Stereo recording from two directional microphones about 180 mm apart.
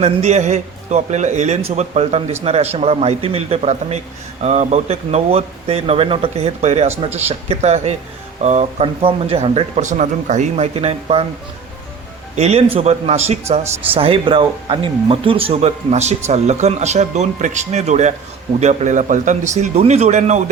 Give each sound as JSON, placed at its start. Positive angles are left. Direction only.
{"t": 0.0, "sound": "speech", "side_deg": -40}
{"t": 12.4, "sound": "speech", "side_deg": -35}